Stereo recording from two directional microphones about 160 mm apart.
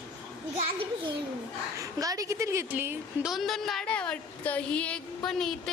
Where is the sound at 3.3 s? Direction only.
Centre (ahead or behind).